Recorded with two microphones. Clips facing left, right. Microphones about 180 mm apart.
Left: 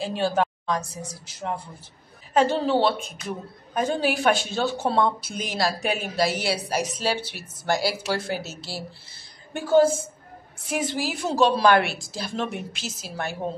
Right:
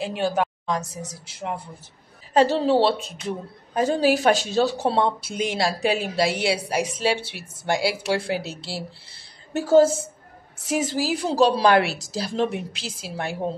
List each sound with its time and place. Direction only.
0.0 s speech: 20° right (ahead or behind)
2.3 s a woman's voice: 35° right (ahead or behind)
9.6 s a woman's voice: 40° right (ahead or behind)